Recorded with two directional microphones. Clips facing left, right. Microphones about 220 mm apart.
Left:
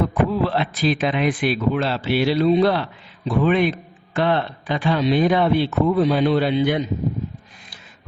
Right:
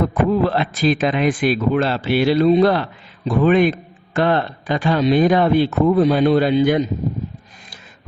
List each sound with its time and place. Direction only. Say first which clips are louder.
0.1 s a man's voice: right 3 dB; 45° right (ahead or behind)